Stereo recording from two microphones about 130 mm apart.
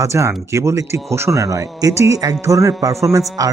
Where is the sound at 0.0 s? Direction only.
25° right (ahead or behind).